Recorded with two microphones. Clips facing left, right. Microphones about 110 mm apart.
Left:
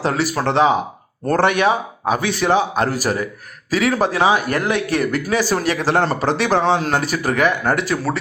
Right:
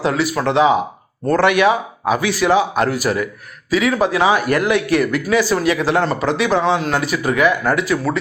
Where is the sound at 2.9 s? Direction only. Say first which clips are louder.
Right 2 dB; 40° left (ahead or behind).